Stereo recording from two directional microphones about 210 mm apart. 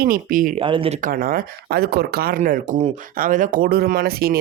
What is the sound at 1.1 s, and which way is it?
Speech, 45° right (ahead or behind).